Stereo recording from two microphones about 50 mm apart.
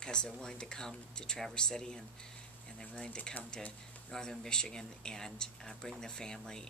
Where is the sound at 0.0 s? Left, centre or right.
Centre.